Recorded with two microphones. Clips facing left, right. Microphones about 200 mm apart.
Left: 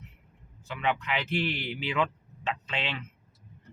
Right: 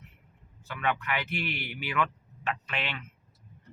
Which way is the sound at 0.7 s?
20° left (ahead or behind).